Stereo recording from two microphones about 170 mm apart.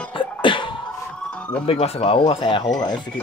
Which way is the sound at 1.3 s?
5° left (ahead or behind).